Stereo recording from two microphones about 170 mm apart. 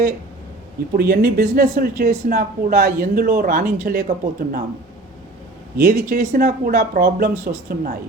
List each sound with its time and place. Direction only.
0.9 s speech: 60° right (ahead or behind)
5.8 s speech: 55° right (ahead or behind)